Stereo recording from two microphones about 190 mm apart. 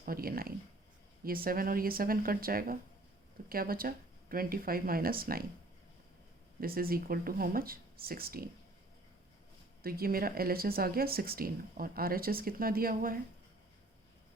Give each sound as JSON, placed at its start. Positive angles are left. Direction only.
{"t": 0.0, "sound": "speech", "side_deg": -50}
{"t": 6.6, "sound": "speech", "side_deg": -50}
{"t": 9.8, "sound": "speech", "side_deg": -50}